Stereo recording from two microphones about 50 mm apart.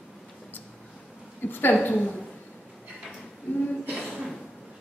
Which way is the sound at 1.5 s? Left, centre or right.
Left.